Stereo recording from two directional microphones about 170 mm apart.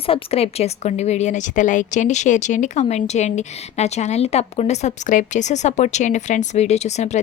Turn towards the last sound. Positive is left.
turn(degrees=40)  # may be behind; listen again after turning